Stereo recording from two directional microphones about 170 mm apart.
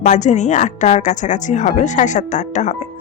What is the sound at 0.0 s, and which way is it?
A woman's voice, 45° left (ahead or behind).